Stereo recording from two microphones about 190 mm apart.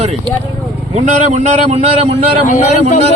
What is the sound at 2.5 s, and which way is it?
Speech, 35° left (ahead or behind).